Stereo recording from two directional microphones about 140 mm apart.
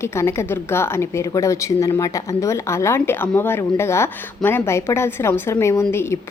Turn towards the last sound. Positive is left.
turn(degrees=20)  # may be behind; listen again after turning